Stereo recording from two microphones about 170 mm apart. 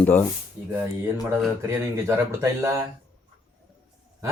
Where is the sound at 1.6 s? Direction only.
15° right (ahead or behind).